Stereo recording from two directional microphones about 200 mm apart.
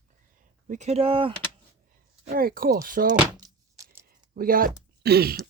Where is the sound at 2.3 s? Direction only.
45° right (ahead or behind).